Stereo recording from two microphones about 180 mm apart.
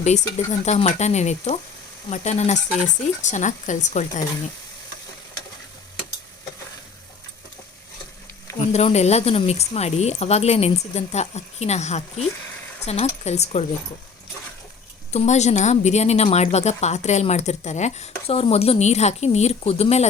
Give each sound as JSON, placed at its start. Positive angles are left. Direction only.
{"t": 0.6, "sound": "a woman's voice", "side_deg": 40}
{"t": 8.7, "sound": "a woman's voice", "side_deg": 35}
{"t": 15.1, "sound": "a woman's voice", "side_deg": 40}